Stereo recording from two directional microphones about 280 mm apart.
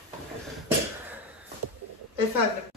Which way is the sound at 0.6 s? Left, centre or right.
Centre.